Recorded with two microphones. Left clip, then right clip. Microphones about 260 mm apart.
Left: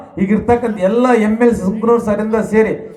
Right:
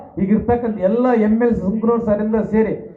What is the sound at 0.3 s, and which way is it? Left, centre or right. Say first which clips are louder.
A man's voice: left 4 dB; left.